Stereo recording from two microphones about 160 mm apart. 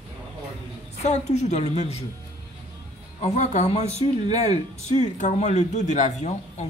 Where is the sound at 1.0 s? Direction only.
45° left (ahead or behind).